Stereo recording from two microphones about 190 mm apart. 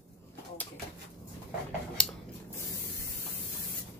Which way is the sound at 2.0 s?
5° left (ahead or behind).